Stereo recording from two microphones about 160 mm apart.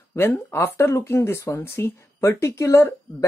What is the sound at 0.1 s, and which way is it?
Speech, 15° left (ahead or behind).